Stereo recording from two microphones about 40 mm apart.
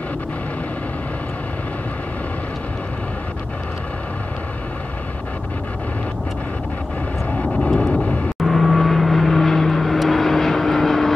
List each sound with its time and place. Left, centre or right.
7.6 s vehicle: left
8.5 s vehicle: centre